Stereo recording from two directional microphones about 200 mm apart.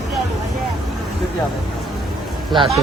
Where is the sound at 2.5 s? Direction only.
Centre (ahead or behind).